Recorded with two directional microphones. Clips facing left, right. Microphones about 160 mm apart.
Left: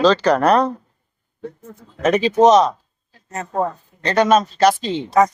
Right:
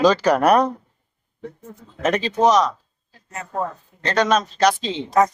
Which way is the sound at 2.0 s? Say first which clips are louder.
Left 4 dB; centre (ahead or behind).